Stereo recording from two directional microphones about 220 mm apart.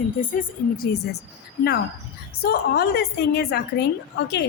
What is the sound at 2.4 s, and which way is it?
A woman's voice, 45° left (ahead or behind).